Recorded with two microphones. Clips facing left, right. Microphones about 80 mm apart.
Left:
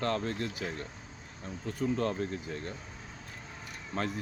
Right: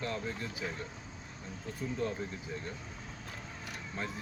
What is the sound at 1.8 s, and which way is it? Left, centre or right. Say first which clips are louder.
Speech: left 5 dB; left.